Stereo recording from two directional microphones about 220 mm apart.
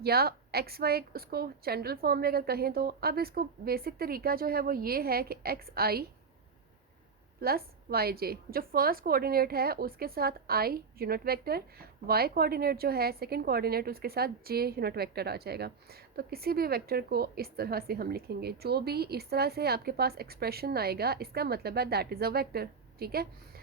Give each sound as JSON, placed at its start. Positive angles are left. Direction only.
{"t": 0.0, "sound": "a woman's voice", "side_deg": -45}
{"t": 7.4, "sound": "a woman's voice", "side_deg": -45}